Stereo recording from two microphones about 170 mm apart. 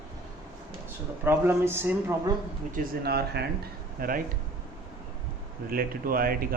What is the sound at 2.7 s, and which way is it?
Speech, 60° right (ahead or behind).